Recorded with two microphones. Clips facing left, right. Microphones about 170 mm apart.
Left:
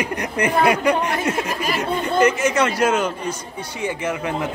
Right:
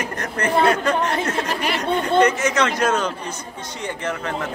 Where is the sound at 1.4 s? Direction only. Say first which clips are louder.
Even; 65° right (ahead or behind).